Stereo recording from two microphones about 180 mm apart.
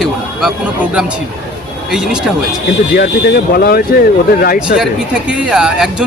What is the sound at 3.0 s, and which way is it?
Speech, 55° left (ahead or behind).